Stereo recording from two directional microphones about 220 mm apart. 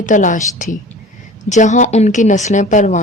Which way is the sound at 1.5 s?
35° left (ahead or behind).